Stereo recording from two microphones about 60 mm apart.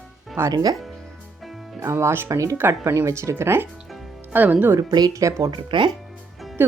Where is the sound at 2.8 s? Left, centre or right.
Right.